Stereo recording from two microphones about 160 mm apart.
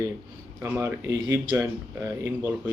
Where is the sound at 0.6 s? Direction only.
15° right (ahead or behind).